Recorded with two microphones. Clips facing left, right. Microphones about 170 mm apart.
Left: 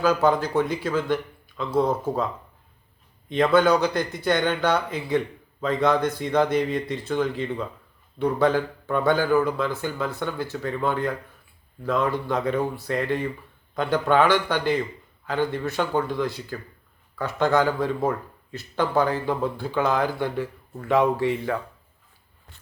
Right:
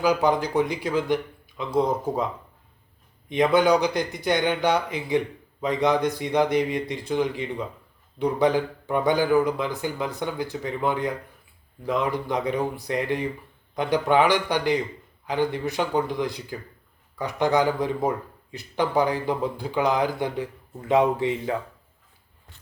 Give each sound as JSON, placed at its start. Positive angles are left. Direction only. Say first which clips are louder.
{"t": 0.0, "sound": "speech", "louder": "left 1 dB", "side_deg": -15}